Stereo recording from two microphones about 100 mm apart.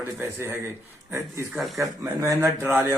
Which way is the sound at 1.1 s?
30° right (ahead or behind).